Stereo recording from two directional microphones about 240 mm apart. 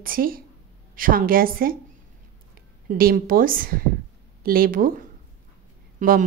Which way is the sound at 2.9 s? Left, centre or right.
Right.